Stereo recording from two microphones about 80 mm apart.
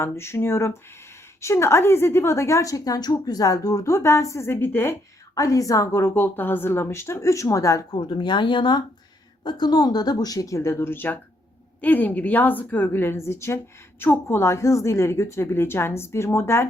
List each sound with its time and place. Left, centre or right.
0.0 s a woman's voice: left
5.3 s a woman's voice: left
7.9 s speech: left
9.4 s a woman's voice: left